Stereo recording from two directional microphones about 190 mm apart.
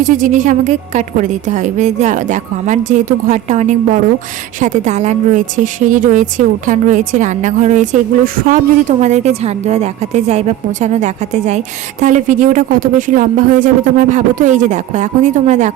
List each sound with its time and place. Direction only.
0.0 s a woman's voice: 45° right (ahead or behind)